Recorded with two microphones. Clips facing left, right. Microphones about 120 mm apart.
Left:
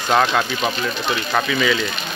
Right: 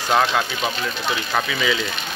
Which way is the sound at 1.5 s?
10° right (ahead or behind).